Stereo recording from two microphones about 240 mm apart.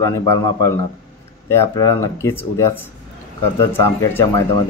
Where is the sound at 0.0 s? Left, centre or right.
Centre.